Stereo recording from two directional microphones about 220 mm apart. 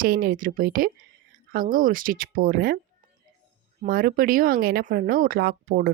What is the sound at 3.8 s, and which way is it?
Speech, 40° right (ahead or behind).